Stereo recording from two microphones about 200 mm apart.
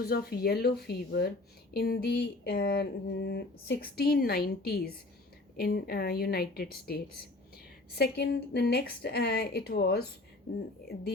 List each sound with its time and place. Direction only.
0.0 s speech: 50° left (ahead or behind)